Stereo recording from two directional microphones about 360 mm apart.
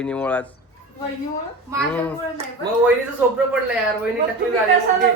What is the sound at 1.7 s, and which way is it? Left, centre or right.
Speech, centre.